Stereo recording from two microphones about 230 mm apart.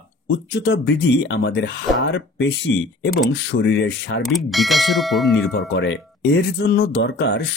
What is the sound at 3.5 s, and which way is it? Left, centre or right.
Speech, left.